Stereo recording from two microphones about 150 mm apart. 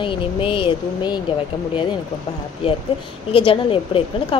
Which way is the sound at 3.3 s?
35° left (ahead or behind).